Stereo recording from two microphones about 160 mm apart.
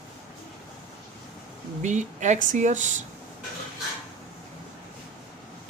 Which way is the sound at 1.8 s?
50° right (ahead or behind).